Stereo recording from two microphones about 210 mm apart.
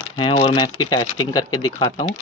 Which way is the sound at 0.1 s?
25° left (ahead or behind).